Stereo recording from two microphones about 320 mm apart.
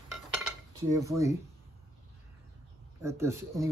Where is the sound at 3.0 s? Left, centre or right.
Centre.